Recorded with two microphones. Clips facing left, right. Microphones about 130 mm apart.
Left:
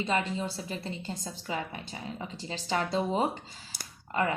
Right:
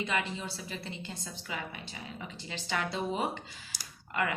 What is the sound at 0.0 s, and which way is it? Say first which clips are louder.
A woman's voice: left 4 dB; 35° left (ahead or behind).